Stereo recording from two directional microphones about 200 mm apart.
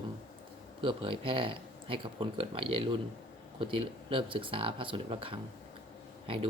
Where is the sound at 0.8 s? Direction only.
25° right (ahead or behind).